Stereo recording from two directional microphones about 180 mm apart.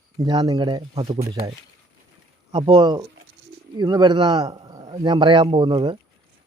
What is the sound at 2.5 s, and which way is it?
Speech, 30° right (ahead or behind).